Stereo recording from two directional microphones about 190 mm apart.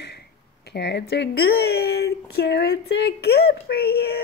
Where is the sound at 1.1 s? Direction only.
55° left (ahead or behind).